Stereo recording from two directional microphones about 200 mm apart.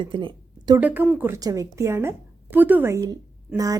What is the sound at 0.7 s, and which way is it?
Speech, 10° right (ahead or behind).